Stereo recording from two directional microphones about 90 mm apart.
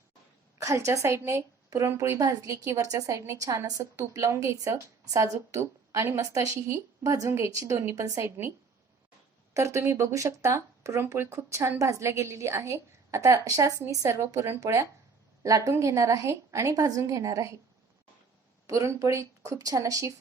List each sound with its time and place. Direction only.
0.6 s a woman's voice: 35° right (ahead or behind)
9.6 s a woman's voice: 35° right (ahead or behind)
18.7 s a woman's voice: 35° right (ahead or behind)